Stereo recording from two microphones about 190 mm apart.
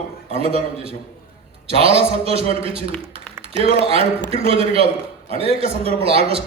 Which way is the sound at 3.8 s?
30° right (ahead or behind).